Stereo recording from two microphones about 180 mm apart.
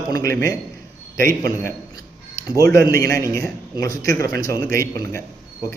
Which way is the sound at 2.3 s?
20° left (ahead or behind).